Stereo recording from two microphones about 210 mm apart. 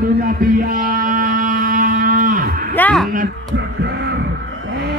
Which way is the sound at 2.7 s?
5° left (ahead or behind).